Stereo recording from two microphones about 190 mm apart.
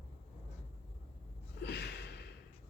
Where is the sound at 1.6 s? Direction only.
60° left (ahead or behind).